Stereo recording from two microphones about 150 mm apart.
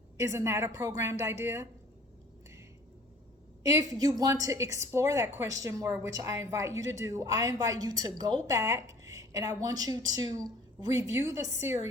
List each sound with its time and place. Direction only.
0.2 s a woman's voice: 20° right (ahead or behind)
3.6 s a woman's voice: 25° right (ahead or behind)